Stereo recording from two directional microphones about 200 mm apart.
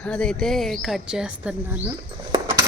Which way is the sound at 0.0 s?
5° left (ahead or behind).